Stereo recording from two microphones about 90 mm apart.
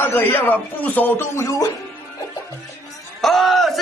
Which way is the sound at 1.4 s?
35° left (ahead or behind).